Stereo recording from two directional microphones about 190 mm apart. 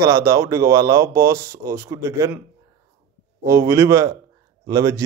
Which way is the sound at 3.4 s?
15° right (ahead or behind).